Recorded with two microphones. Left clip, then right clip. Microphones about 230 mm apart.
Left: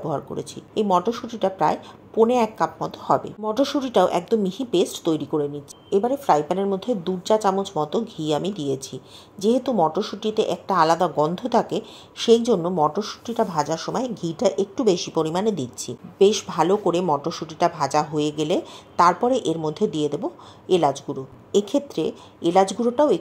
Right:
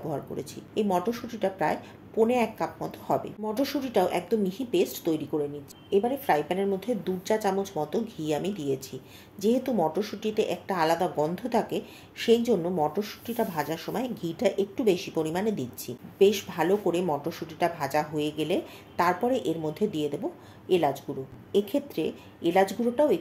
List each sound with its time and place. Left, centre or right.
0.1 s speech: centre